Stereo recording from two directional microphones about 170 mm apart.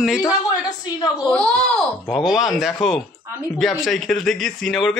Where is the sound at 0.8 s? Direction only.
25° left (ahead or behind).